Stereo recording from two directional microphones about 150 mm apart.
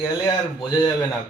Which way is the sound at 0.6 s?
30° left (ahead or behind).